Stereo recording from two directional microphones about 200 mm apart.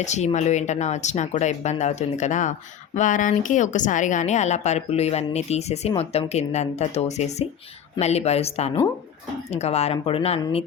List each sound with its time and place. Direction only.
0.0 s speech: 35° left (ahead or behind)